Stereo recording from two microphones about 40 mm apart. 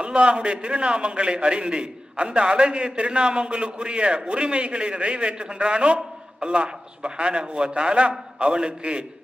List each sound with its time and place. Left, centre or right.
0.0 s a man's voice: right